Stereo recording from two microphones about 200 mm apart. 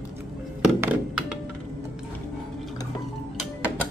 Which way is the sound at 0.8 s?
5° right (ahead or behind).